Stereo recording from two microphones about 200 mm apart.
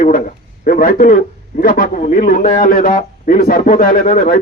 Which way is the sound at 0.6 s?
45° left (ahead or behind).